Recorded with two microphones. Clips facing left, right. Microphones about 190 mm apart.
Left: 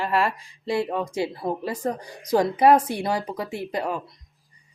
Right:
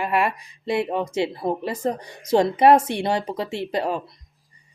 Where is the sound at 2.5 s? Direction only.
25° right (ahead or behind).